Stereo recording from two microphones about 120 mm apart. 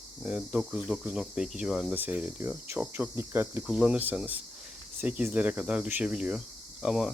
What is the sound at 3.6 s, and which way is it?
Speech, 5° right (ahead or behind).